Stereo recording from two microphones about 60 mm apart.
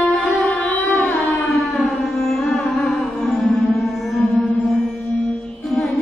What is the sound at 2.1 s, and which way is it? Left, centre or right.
Music, centre.